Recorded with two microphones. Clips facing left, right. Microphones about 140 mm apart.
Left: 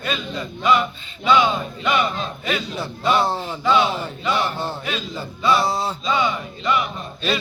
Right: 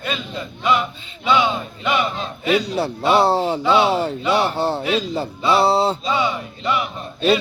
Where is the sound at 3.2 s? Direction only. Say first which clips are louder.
Right 6 dB; 30° right (ahead or behind).